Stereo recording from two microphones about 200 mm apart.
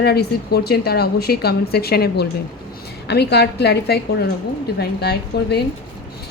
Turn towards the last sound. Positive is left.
turn(degrees=55)  # may be behind; listen again after turning